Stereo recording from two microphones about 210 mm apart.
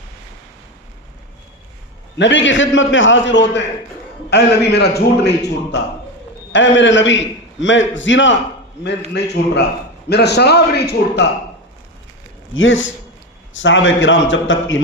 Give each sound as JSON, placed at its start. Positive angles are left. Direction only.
{"t": 2.1, "sound": "a man's voice", "side_deg": 60}
{"t": 12.5, "sound": "a man's voice", "side_deg": 65}